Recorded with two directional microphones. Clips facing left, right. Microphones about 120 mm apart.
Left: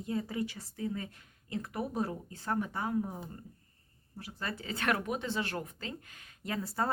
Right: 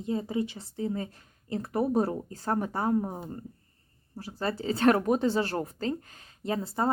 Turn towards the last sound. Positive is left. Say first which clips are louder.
# right 5 dB
turn(degrees=-25)  # may be behind; listen again after turning